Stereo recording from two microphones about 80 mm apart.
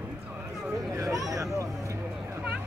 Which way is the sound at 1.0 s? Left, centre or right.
Right.